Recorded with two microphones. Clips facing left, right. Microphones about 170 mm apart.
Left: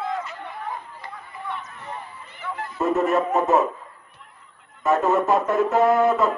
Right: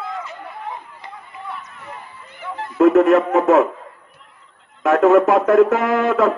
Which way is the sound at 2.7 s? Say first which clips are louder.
Right 9 dB; 85° right.